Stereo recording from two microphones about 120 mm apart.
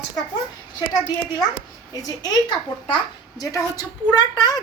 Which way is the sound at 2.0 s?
30° left (ahead or behind).